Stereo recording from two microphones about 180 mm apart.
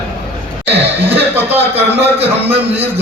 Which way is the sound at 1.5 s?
35° right (ahead or behind).